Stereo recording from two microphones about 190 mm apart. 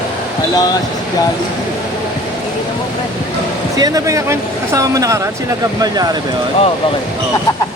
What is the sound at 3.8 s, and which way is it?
Speech, 20° right (ahead or behind).